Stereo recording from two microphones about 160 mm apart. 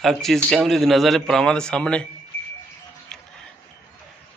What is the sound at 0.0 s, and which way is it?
A man's voice, centre (ahead or behind).